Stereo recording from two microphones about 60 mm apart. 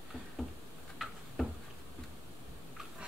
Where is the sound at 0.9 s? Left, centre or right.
Centre.